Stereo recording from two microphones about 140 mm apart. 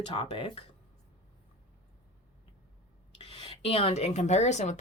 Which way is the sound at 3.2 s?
40° left (ahead or behind).